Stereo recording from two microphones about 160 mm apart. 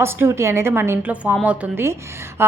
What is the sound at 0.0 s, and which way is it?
A woman's voice, 15° right (ahead or behind).